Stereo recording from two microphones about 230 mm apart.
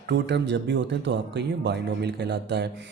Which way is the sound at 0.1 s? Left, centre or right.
Right.